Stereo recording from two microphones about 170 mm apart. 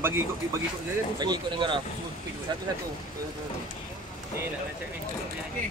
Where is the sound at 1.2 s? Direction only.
25° right (ahead or behind).